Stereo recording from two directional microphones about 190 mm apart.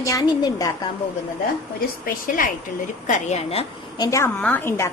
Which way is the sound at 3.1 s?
35° left (ahead or behind).